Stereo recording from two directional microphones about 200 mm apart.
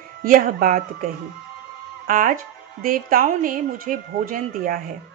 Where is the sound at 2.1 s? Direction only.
40° right (ahead or behind).